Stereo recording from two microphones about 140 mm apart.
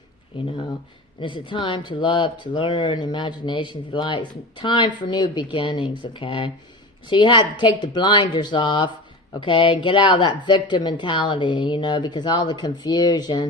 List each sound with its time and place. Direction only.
1.2 s speech: 35° left (ahead or behind)